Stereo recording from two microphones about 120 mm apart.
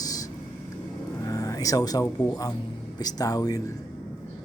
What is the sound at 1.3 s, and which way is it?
Speech, 30° left (ahead or behind).